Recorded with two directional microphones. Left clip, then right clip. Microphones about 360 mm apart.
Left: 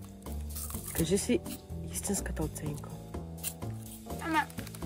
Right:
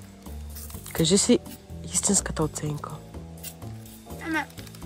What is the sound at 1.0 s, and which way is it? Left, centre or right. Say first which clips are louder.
Speech: right 9 dB; right.